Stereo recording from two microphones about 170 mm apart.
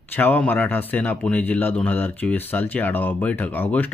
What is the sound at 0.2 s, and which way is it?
A man's voice, 10° left (ahead or behind).